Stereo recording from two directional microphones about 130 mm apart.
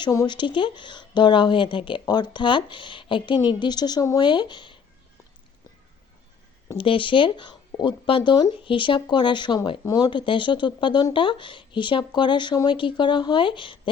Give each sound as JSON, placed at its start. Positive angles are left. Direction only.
{"t": 0.0, "sound": "speech", "side_deg": 30}
{"t": 6.7, "sound": "speech", "side_deg": 40}